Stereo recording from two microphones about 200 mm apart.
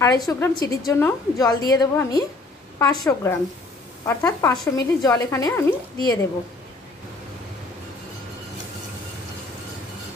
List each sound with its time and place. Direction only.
0.0 s a woman's voice: 20° left (ahead or behind)